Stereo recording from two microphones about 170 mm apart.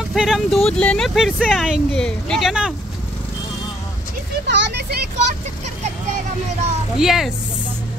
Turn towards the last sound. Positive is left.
turn(degrees=0)  # may be behind; listen again after turning